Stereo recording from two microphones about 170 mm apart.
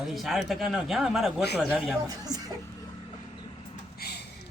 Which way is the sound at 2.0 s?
20° right (ahead or behind).